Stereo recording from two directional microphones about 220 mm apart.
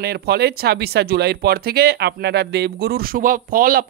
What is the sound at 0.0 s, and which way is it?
A man's voice, 45° right (ahead or behind).